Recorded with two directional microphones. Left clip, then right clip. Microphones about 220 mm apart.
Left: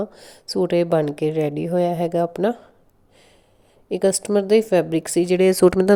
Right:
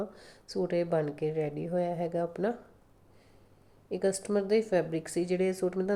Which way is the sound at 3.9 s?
40° left (ahead or behind).